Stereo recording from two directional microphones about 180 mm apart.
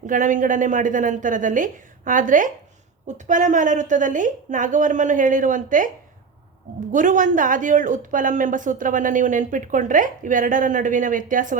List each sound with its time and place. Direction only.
0.1 s speech: 45° right (ahead or behind)
6.9 s speech: 45° right (ahead or behind)